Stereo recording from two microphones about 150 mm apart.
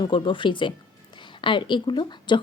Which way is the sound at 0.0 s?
35° left (ahead or behind).